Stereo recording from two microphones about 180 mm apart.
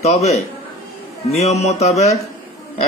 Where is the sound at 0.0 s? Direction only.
40° left (ahead or behind).